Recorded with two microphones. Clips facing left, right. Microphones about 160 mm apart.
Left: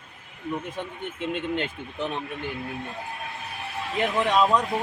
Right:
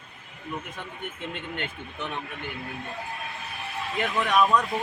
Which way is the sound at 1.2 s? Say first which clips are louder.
Left 8 dB; 25° left (ahead or behind).